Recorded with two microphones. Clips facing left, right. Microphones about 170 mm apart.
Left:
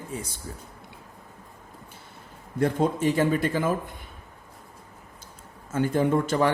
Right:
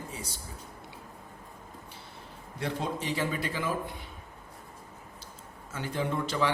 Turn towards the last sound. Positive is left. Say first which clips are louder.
# left 7 dB
turn(degrees=50)  # may be behind; listen again after turning